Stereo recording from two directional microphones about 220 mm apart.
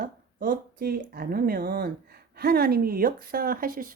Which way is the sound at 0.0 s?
40° right (ahead or behind).